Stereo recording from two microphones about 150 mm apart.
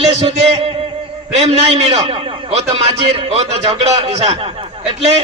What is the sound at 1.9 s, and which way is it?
A man's voice, 45° right (ahead or behind).